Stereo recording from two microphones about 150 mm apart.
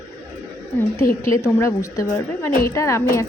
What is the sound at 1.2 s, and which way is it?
A woman's voice, 20° left (ahead or behind).